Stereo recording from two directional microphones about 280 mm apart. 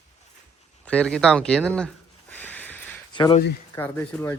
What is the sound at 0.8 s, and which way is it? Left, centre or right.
Speech, centre.